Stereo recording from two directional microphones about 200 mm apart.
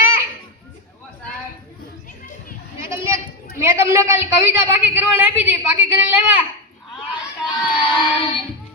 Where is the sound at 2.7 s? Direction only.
15° right (ahead or behind).